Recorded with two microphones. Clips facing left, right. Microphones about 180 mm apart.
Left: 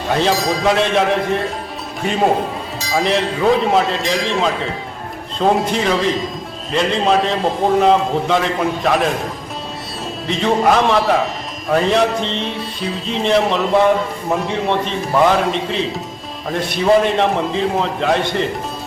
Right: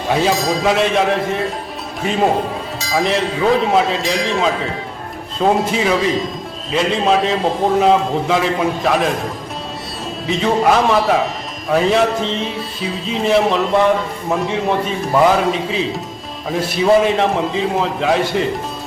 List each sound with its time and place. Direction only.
0.1 s a man's voice: 5° right (ahead or behind)
10.2 s a man's voice: centre (ahead or behind)